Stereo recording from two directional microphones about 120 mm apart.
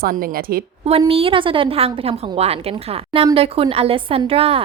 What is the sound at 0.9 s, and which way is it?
A woman's voice, 55° right (ahead or behind).